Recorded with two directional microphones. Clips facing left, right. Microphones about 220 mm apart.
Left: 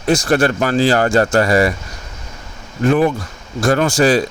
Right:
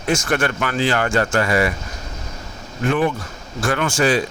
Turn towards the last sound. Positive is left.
turn(degrees=35)  # may be behind; listen again after turning